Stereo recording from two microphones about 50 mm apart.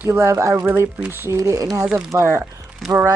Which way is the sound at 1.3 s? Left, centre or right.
Right.